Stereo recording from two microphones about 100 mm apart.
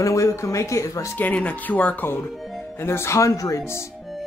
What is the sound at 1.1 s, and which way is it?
Speech, 15° left (ahead or behind).